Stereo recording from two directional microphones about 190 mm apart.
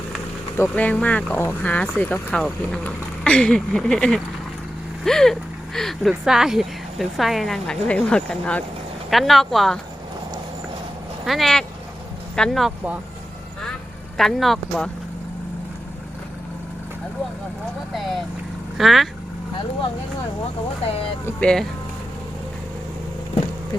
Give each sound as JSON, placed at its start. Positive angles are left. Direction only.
{"t": 0.5, "sound": "speech", "side_deg": 10}
{"t": 11.3, "sound": "speech", "side_deg": 0}
{"t": 14.2, "sound": "speech", "side_deg": 0}
{"t": 18.8, "sound": "speech", "side_deg": 0}
{"t": 20.8, "sound": "speech", "side_deg": 30}
{"t": 21.2, "sound": "speech", "side_deg": 5}